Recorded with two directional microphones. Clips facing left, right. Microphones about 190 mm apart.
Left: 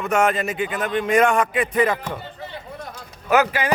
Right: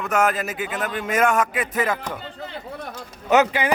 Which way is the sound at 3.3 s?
20° right (ahead or behind).